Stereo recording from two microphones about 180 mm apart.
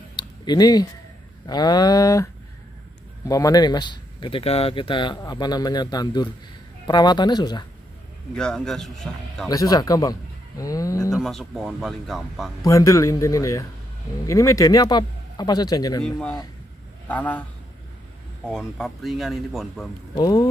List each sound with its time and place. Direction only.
0.1 s a sound: 25° left (ahead or behind)
1.5 s speech: 25° left (ahead or behind)
3.3 s speech: 20° left (ahead or behind)
8.4 s speech: 5° left (ahead or behind)
9.5 s speech: 20° left (ahead or behind)
11.2 s speech: centre (ahead or behind)
12.6 s speech: 15° left (ahead or behind)
16.0 s speech: 5° left (ahead or behind)
18.5 s speech: centre (ahead or behind)
20.2 s speech: 25° left (ahead or behind)